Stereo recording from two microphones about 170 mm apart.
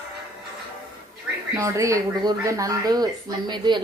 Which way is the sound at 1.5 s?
20° right (ahead or behind).